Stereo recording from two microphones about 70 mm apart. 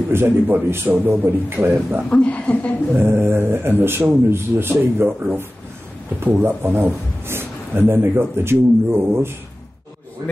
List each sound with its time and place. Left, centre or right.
0.1 s a man's voice: right
2.0 s a woman's voice: centre
3.0 s a man's voice: right